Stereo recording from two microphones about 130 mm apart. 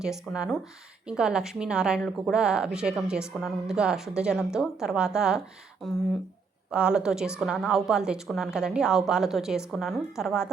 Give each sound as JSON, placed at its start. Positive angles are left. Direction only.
{"t": 0.0, "sound": "a woman's voice", "side_deg": -5}
{"t": 6.7, "sound": "a woman's voice", "side_deg": -10}